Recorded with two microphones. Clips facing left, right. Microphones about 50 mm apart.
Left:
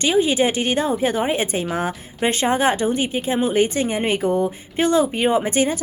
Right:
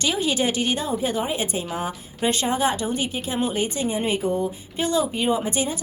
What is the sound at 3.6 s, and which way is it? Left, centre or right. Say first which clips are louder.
Speech: left 5 dB; left.